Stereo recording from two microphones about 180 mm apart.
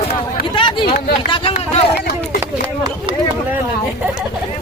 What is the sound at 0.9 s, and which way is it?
Speech, 55° left (ahead or behind).